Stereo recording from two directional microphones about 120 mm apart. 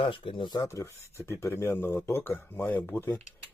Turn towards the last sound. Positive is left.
turn(degrees=20)  # may be behind; listen again after turning